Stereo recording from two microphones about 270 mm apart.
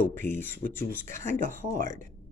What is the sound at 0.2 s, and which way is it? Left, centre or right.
Speech, centre.